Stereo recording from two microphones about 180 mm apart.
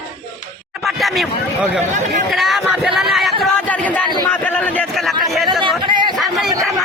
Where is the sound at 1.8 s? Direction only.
45° right (ahead or behind).